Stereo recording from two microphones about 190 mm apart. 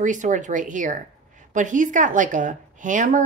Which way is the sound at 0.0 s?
40° right (ahead or behind).